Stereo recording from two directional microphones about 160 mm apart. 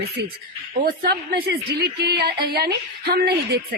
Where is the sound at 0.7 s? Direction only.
65° right (ahead or behind); by 3.6 s 90° right.